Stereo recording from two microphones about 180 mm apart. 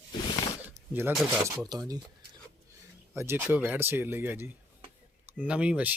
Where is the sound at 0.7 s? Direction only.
10° right (ahead or behind).